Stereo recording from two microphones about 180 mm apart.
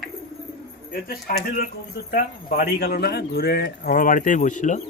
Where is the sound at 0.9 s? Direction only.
55° left (ahead or behind).